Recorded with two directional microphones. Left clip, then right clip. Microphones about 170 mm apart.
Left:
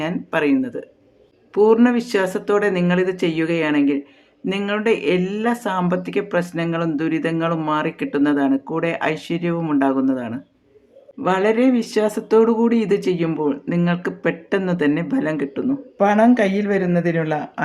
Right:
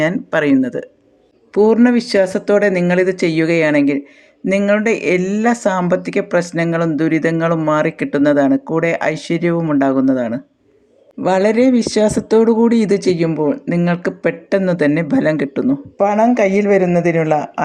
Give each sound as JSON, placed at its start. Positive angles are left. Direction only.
{"t": 0.0, "sound": "speech", "side_deg": -35}
{"t": 1.5, "sound": "speech", "side_deg": -25}